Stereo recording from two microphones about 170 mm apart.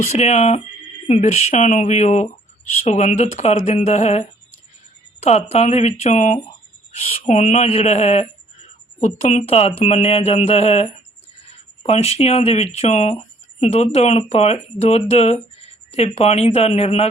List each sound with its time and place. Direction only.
0.1 s speech: 40° left (ahead or behind)